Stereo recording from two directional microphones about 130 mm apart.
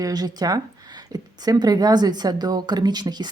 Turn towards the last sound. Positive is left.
turn(degrees=-35)  # may be behind; listen again after turning